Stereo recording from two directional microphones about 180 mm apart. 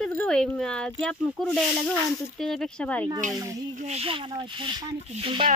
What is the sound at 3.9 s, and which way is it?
Speech, 35° right (ahead or behind).